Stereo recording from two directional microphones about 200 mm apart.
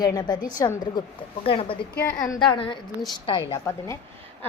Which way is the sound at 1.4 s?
25° left (ahead or behind).